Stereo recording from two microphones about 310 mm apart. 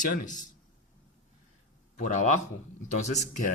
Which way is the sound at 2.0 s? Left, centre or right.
Left.